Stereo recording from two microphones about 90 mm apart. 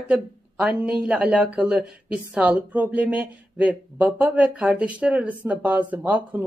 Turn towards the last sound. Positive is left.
turn(degrees=-20)  # may be behind; listen again after turning